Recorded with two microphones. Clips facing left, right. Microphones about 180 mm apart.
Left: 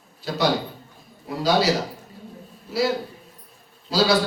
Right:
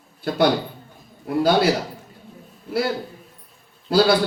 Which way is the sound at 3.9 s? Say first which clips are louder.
Right 4 dB; 55° right (ahead or behind).